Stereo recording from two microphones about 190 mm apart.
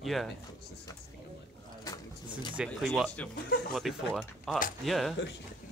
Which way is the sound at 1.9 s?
20° left (ahead or behind).